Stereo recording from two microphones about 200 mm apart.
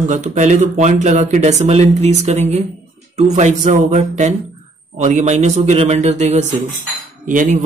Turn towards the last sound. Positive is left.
turn(degrees=-40)  # may be behind; listen again after turning